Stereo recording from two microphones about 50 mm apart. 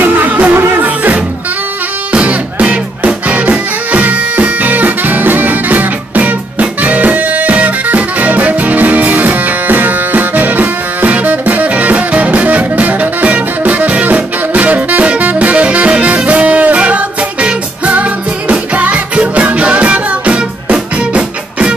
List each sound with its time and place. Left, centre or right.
0.0 s music: right
0.6 s music: right
0.8 s music: right